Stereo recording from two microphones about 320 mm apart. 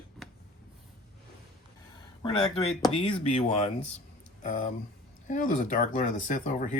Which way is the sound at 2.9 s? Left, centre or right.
Centre.